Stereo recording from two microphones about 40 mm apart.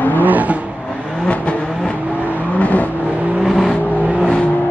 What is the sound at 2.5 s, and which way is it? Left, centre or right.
Vehicle, left.